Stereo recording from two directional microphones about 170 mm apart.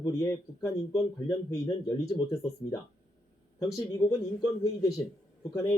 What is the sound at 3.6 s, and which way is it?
Speech, 20° left (ahead or behind).